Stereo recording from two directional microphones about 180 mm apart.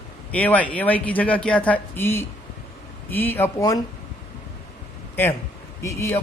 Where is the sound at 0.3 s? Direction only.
10° left (ahead or behind).